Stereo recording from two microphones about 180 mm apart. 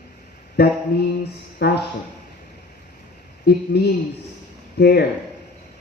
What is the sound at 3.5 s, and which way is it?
A man's voice, 65° left (ahead or behind).